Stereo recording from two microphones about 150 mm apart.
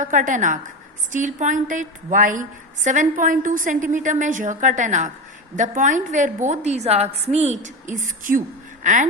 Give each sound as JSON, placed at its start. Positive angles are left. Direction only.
{"t": 0.0, "sound": "a woman's voice", "side_deg": -60}